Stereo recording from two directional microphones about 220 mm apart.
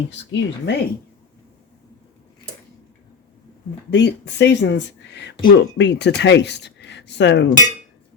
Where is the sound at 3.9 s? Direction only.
50° left (ahead or behind).